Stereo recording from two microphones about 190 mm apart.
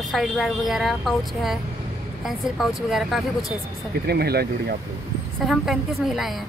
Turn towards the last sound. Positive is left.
turn(degrees=0)  # may be behind; listen again after turning